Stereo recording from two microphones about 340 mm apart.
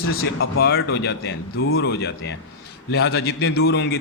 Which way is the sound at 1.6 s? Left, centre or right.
Left.